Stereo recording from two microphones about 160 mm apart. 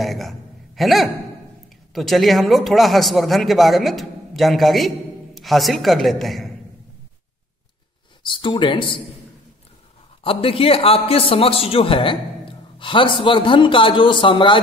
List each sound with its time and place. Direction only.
0.0 s a man's voice: centre (ahead or behind)
8.2 s a man's voice: 30° left (ahead or behind)
10.2 s a man's voice: 35° left (ahead or behind)